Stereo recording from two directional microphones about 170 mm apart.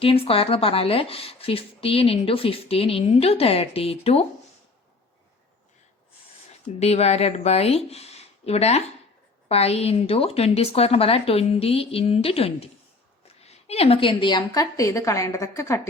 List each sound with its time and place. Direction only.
0.0 s a woman's voice: 35° left (ahead or behind)
6.7 s a woman's voice: 40° left (ahead or behind); by 15.9 s 20° left (ahead or behind)